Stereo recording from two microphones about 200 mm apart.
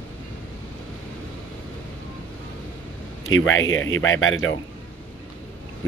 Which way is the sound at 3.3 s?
75° left (ahead or behind).